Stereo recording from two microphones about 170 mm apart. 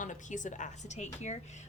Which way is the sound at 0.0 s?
45° left (ahead or behind).